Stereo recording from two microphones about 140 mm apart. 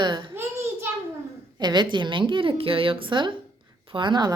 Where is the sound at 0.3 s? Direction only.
15° right (ahead or behind).